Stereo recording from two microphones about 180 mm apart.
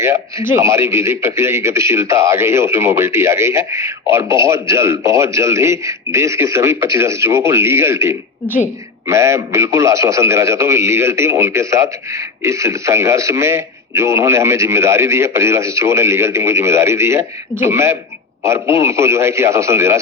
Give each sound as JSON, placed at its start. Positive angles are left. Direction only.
{"t": 0.0, "sound": "a man's voice", "side_deg": -15}
{"t": 8.4, "sound": "speech", "side_deg": 10}
{"t": 9.0, "sound": "a man's voice", "side_deg": -15}